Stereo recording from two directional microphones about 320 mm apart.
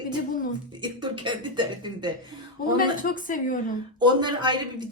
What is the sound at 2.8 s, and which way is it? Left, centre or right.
Speech, left.